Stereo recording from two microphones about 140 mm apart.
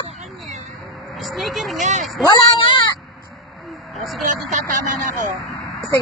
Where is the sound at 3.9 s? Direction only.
Centre (ahead or behind).